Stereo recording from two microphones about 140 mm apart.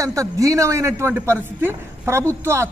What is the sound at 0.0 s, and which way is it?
A man's voice, 25° right (ahead or behind).